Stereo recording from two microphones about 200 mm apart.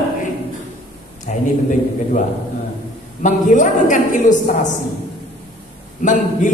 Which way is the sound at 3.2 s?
40° left (ahead or behind).